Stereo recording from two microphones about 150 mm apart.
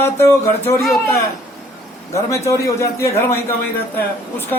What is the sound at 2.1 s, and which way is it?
A man's voice, 20° left (ahead or behind).